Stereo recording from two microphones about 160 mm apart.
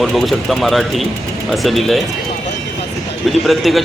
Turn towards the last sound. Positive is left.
turn(degrees=0)  # may be behind; listen again after turning